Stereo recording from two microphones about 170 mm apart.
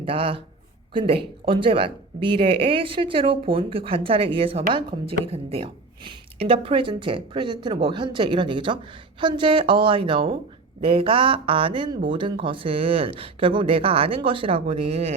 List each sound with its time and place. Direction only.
0.0 s speech: 30° right (ahead or behind)